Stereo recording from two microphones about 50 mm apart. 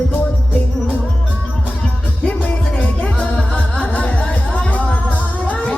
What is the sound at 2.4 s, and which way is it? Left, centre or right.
Music, left.